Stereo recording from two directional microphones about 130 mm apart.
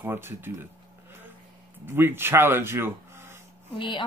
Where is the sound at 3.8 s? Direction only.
40° left (ahead or behind).